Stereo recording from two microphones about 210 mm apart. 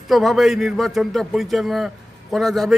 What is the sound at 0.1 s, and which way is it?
A man's voice, centre (ahead or behind).